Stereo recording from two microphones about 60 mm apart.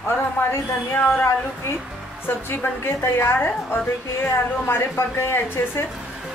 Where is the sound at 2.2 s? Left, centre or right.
Left.